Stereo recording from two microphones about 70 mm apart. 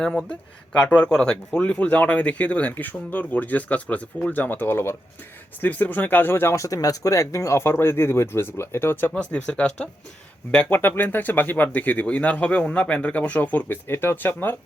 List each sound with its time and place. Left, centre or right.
0.0 s speech: centre; by 6.6 s left
6.6 s speech: left
9.1 s speech: centre